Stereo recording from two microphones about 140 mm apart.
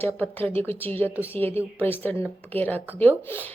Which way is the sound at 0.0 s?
15° left (ahead or behind).